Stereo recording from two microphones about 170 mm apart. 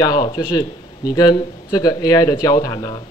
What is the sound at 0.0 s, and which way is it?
A man's voice, 25° left (ahead or behind).